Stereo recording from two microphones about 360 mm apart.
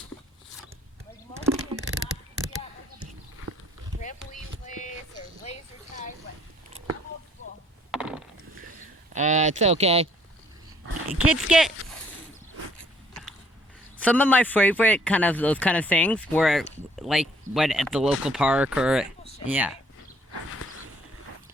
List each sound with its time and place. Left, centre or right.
1.4 s a sound: centre
4.3 s a sound: centre
7.9 s mechanisms: centre
9.1 s speech: centre
11.1 s speech: centre
14.0 s speech: centre